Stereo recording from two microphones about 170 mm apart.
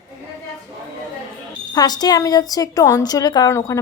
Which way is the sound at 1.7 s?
25° left (ahead or behind).